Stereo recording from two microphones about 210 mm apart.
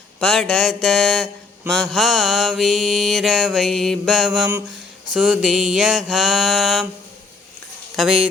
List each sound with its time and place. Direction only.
0.2 s mantra: centre (ahead or behind)
7.9 s mantra: centre (ahead or behind)